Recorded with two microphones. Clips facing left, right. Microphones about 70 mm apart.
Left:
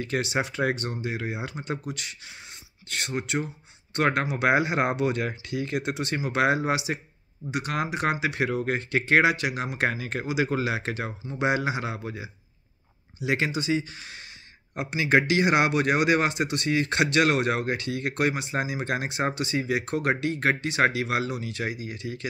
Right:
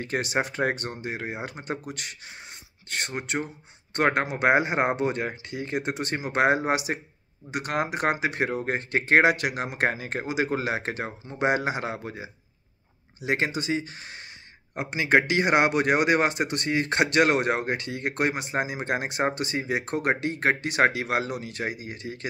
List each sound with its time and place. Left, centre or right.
0.0 s speech: right